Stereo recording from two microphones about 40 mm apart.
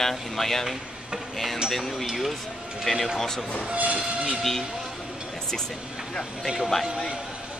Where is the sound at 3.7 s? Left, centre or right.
Right.